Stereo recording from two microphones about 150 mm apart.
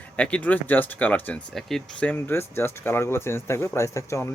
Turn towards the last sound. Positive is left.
turn(degrees=20)  # may be behind; listen again after turning